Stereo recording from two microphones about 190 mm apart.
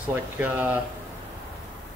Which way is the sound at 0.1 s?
10° right (ahead or behind).